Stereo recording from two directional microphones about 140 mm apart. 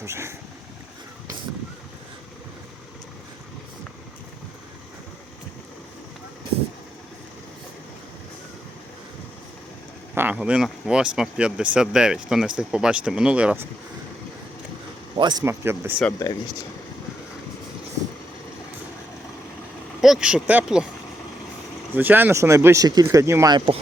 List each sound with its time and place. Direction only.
0.0 s speech: 20° right (ahead or behind)
10.2 s speech: 10° right (ahead or behind)
15.1 s speech: 30° right (ahead or behind)
15.4 s speech: 20° right (ahead or behind)
20.0 s speech: 5° right (ahead or behind)
21.9 s speech: 15° right (ahead or behind); by 23.7 s 30° right (ahead or behind)